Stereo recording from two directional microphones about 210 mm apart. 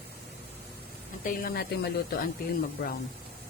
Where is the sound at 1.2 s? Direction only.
45° left (ahead or behind).